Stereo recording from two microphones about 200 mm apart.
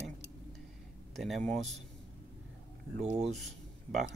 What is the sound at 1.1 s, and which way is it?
Speech, centre (ahead or behind).